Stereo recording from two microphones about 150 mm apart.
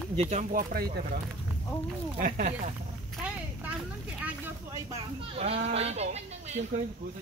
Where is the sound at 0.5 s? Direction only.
80° right.